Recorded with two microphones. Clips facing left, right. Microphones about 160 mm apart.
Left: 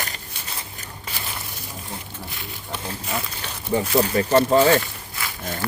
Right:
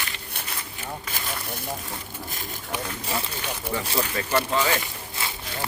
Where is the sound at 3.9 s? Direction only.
30° left (ahead or behind).